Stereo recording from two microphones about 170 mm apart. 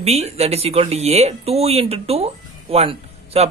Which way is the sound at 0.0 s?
35° right (ahead or behind).